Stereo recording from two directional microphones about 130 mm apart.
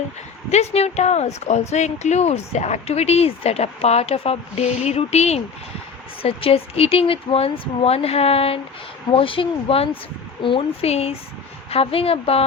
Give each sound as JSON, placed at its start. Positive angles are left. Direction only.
{"t": 0.5, "sound": "speech", "side_deg": 55}